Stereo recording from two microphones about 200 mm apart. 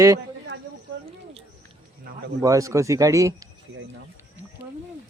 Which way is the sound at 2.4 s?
15° right (ahead or behind).